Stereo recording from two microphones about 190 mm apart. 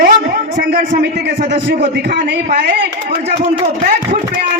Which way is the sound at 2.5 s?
65° right (ahead or behind).